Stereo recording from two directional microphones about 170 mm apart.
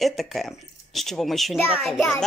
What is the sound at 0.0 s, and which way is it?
Speech, centre (ahead or behind).